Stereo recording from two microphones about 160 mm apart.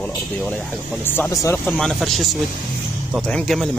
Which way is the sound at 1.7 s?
Centre (ahead or behind).